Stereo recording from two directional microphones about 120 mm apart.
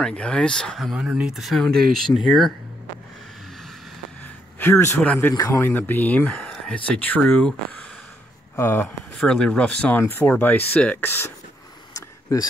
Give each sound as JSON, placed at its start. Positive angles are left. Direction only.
{"t": 0.0, "sound": "speech", "side_deg": 10}
{"t": 4.2, "sound": "a sound", "side_deg": 20}
{"t": 5.0, "sound": "speech", "side_deg": 10}
{"t": 8.5, "sound": "speech", "side_deg": 20}
{"t": 8.8, "sound": "speech", "side_deg": 10}
{"t": 11.9, "sound": "a sound", "side_deg": 30}